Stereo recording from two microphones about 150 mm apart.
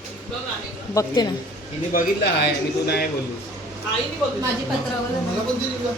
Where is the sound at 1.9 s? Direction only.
80° left.